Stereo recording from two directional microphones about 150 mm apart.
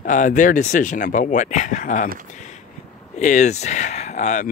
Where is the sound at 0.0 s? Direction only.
60° left (ahead or behind).